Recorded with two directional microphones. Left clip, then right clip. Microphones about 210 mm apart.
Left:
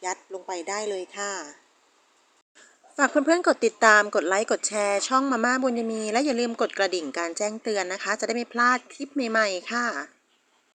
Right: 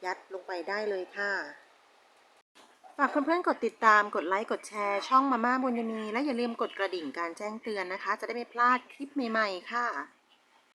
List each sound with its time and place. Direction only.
0.0 s speech: 15° left (ahead or behind)
2.9 s speech: 20° left (ahead or behind)